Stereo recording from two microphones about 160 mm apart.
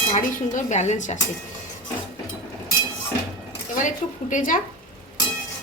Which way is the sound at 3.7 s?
50° left (ahead or behind).